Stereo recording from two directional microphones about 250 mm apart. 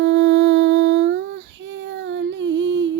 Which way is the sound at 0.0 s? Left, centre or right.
Right.